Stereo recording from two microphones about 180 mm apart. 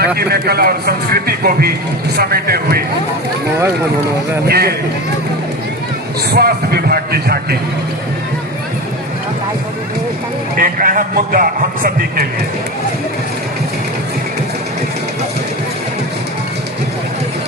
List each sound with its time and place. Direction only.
0.2 s a man's voice: 60° right (ahead or behind)
4.4 s a man's voice: 60° right (ahead or behind)
6.3 s a man's voice: 60° right (ahead or behind)
10.6 s a man's voice: 50° right (ahead or behind)